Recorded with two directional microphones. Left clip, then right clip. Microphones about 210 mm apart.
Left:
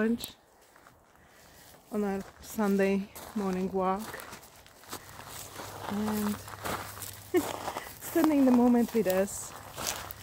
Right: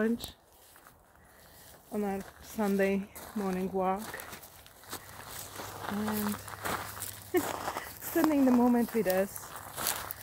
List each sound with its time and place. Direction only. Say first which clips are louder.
0.0 s speech: left 1 dB; 10° left (ahead or behind)
1.9 s speech: left 2 dB; 20° left (ahead or behind)
3.2 s speech: left 2 dB; centre (ahead or behind)
3.4 s speech: left 1 dB; 15° left (ahead or behind)
4.8 s a sound: left 1 dB; 5° right (ahead or behind)
7.8 s speech: left 3 dB; 10° left (ahead or behind)
9.4 s walk: even; centre (ahead or behind)